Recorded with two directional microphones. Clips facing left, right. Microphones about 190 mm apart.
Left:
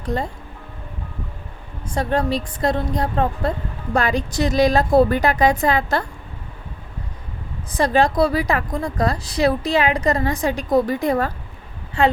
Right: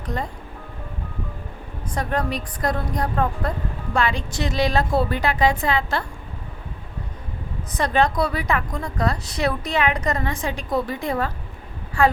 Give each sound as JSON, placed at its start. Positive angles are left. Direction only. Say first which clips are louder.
{"t": 0.0, "sound": "speech", "louder": "left 4 dB", "side_deg": 30}
{"t": 1.9, "sound": "a woman's voice", "louder": "left 4 dB", "side_deg": 30}
{"t": 3.9, "sound": "a woman's voice", "louder": "left 4 dB", "side_deg": 40}
{"t": 7.8, "sound": "a woman's voice", "louder": "left 4 dB", "side_deg": 30}
{"t": 12.0, "sound": "a woman's voice", "louder": "left 1 dB", "side_deg": 25}